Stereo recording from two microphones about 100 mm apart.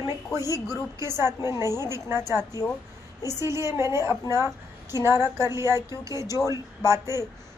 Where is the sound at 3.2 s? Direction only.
35° left (ahead or behind).